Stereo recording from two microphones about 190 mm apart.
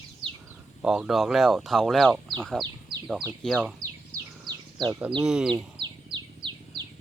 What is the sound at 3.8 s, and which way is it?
Bird, 20° right (ahead or behind).